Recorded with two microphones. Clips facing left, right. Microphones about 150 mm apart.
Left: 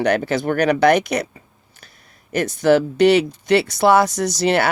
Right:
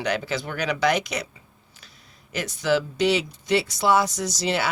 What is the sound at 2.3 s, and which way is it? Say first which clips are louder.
Speech: left 8 dB; 55° left (ahead or behind).